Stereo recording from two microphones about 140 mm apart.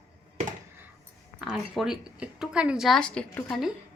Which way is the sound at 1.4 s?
5° right (ahead or behind).